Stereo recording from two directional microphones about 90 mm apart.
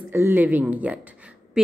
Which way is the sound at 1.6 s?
5° right (ahead or behind).